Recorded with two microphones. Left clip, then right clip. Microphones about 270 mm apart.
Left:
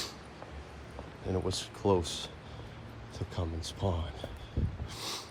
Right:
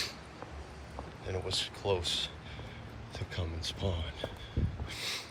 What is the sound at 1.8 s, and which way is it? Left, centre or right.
Speech, left.